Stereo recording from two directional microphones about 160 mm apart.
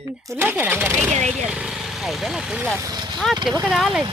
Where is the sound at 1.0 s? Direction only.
45° right (ahead or behind).